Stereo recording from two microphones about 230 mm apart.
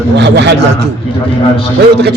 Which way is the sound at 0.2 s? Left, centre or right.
Right.